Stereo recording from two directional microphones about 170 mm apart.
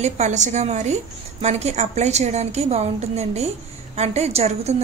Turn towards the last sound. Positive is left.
turn(degrees=-40)  # may be behind; listen again after turning